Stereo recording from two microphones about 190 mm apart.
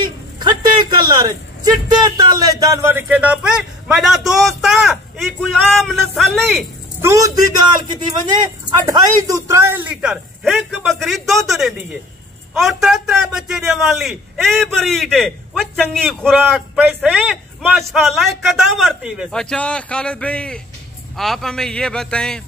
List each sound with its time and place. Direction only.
0.0 s a man's voice: 20° right (ahead or behind); by 6.6 s centre (ahead or behind)
7.0 s a man's voice: 15° right (ahead or behind)
8.6 s a man's voice: 20° right (ahead or behind); by 16.3 s 5° left (ahead or behind)
16.3 s a man's voice: 10° right (ahead or behind)